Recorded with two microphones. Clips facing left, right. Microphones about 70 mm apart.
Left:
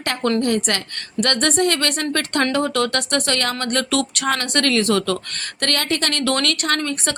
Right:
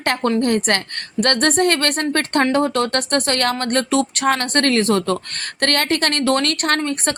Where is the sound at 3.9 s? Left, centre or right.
Right.